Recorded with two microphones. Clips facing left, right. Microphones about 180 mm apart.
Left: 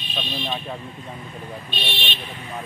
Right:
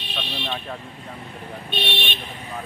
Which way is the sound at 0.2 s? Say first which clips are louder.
Left 2 dB; 10° left (ahead or behind).